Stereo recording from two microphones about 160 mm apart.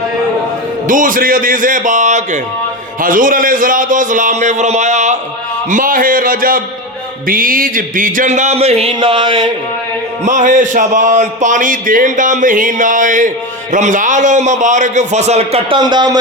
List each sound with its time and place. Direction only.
0.9 s speech: 55° right (ahead or behind); by 9.5 s 30° right (ahead or behind)
10.2 s speech: 50° right (ahead or behind)
15.8 s speech: 25° right (ahead or behind)